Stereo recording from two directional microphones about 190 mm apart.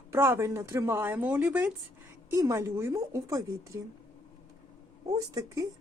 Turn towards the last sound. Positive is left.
turn(degrees=-20)  # may be behind; listen again after turning